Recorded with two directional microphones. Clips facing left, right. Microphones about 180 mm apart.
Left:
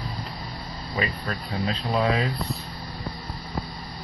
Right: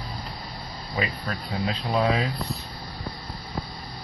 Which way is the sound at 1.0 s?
Centre (ahead or behind).